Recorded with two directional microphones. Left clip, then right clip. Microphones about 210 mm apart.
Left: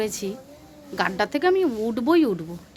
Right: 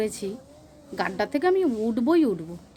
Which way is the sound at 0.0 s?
10° right (ahead or behind).